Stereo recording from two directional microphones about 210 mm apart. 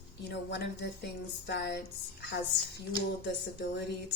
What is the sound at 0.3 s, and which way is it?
Speech, 55° left (ahead or behind).